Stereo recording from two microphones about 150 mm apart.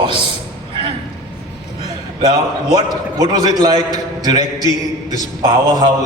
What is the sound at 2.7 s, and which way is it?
A man's voice, 25° right (ahead or behind).